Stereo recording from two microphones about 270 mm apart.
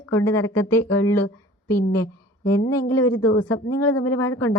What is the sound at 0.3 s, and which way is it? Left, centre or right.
Speech, left.